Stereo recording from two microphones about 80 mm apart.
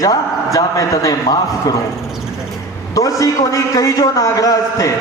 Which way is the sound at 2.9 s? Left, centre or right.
Left.